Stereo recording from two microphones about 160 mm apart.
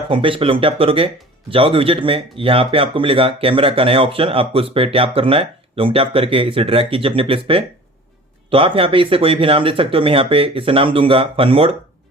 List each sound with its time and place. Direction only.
0.1 s speech: 35° right (ahead or behind)